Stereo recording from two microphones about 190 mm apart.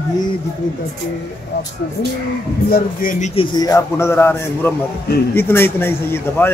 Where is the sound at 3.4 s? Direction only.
20° left (ahead or behind).